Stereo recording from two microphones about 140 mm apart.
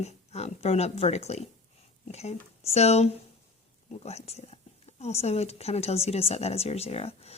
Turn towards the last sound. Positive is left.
turn(degrees=45)  # may be behind; listen again after turning